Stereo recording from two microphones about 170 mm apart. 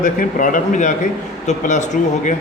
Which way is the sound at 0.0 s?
50° left (ahead or behind).